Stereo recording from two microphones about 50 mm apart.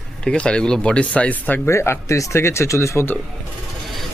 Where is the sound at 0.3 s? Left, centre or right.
Centre.